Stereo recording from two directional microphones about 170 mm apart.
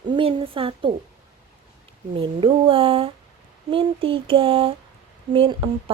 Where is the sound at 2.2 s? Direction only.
30° right (ahead or behind).